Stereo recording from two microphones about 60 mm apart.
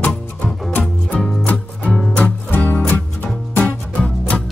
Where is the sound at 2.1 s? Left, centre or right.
Left.